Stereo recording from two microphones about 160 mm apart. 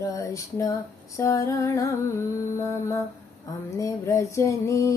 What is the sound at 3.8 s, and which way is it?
Music, 20° left (ahead or behind).